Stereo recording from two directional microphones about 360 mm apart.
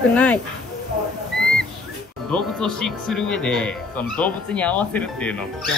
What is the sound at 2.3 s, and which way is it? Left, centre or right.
Speech, centre.